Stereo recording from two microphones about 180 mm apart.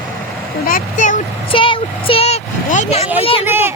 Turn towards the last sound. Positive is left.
turn(degrees=-10)  # may be behind; listen again after turning